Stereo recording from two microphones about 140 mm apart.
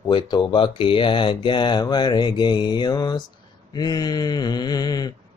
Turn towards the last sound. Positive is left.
turn(degrees=30)  # may be behind; listen again after turning